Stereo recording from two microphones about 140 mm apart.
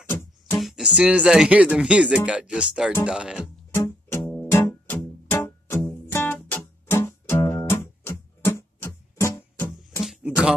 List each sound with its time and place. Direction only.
0.6 s speech: centre (ahead or behind)
3.7 s music: 15° left (ahead or behind)
10.0 s a sound: 5° right (ahead or behind)